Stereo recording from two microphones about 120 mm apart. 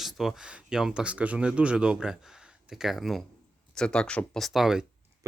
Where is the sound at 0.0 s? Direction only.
Centre (ahead or behind).